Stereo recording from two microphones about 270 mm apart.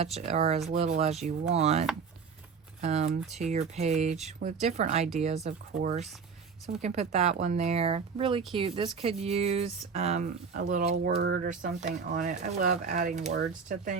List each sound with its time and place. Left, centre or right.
0.0 s speech: right